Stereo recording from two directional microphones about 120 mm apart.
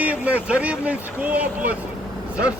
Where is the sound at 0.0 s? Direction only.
10° right (ahead or behind).